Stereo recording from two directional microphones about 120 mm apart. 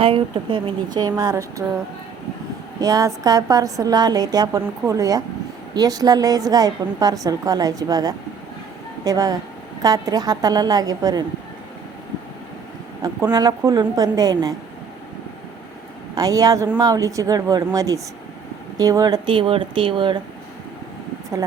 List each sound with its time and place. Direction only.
0.0 s speech: 45° right (ahead or behind)
0.9 s a woman's voice: 35° right (ahead or behind)
2.8 s a woman's voice: 30° right (ahead or behind)
13.3 s a woman's voice: 35° right (ahead or behind)
16.1 s a woman's voice: 30° right (ahead or behind)